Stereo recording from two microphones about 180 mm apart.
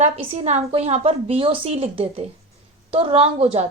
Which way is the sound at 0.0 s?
35° right (ahead or behind).